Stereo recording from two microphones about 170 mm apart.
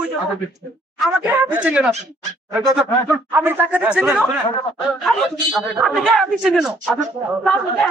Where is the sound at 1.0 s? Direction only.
5° right (ahead or behind).